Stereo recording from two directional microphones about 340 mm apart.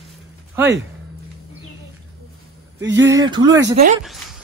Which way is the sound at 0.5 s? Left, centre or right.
Centre.